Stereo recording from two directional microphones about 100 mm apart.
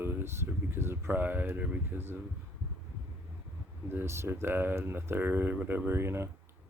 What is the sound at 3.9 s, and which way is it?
Speech, 25° right (ahead or behind).